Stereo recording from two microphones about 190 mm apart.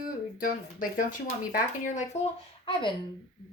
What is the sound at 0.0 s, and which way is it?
Speech, 45° left (ahead or behind).